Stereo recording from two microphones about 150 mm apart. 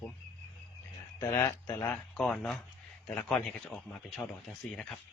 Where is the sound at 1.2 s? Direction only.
15° left (ahead or behind).